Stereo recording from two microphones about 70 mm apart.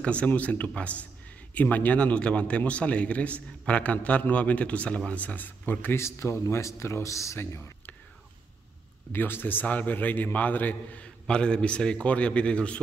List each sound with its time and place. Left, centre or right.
0.0 s speech: centre
5.9 s speech: left
7.3 s speech: left
9.1 s speech: left